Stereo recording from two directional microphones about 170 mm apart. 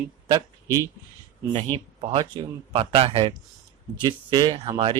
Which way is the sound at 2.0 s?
30° right (ahead or behind).